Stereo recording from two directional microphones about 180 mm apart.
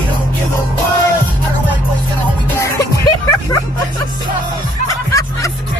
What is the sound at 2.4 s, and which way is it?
Music, 15° left (ahead or behind).